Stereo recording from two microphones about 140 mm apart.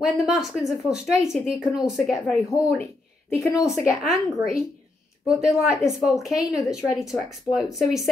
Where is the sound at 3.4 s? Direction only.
20° left (ahead or behind).